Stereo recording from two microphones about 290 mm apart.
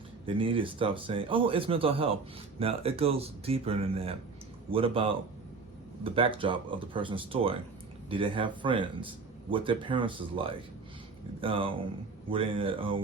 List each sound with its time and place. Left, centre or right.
0.3 s speech: centre